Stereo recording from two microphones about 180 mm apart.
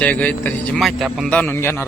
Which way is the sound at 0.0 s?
10° left (ahead or behind).